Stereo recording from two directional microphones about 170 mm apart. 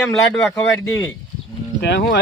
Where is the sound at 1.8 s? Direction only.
85° left.